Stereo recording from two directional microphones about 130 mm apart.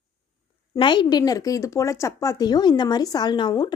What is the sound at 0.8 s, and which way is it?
Speech, 35° left (ahead or behind).